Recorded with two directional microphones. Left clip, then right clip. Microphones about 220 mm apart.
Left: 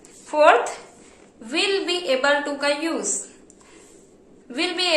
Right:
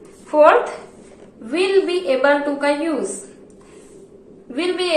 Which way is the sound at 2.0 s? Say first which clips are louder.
Right 4 dB; 45° left (ahead or behind).